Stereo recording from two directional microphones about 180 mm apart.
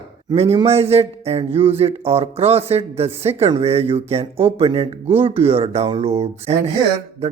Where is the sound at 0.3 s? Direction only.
35° right (ahead or behind).